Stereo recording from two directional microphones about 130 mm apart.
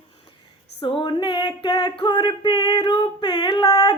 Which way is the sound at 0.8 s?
40° left (ahead or behind).